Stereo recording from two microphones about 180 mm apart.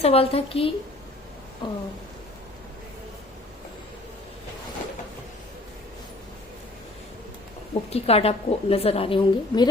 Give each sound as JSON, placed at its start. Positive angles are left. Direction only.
{"t": 0.0, "sound": "a woman's voice", "side_deg": 35}
{"t": 1.6, "sound": "a sound", "side_deg": 25}
{"t": 7.7, "sound": "a woman's voice", "side_deg": 35}